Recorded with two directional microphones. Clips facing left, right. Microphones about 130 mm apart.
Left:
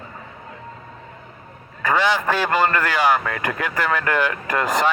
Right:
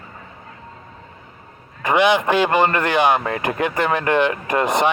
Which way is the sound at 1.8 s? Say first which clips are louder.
Right 3 dB; 20° right (ahead or behind).